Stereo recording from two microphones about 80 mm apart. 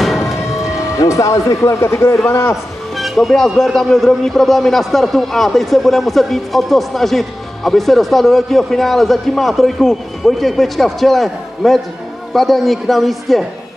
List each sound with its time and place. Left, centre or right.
0.0 s vehicle: centre
0.9 s speech: left
3.0 s a man's voice: centre